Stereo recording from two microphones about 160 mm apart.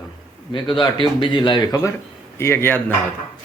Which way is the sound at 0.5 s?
30° left (ahead or behind).